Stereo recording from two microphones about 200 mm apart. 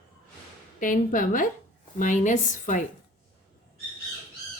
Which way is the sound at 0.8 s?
40° left (ahead or behind).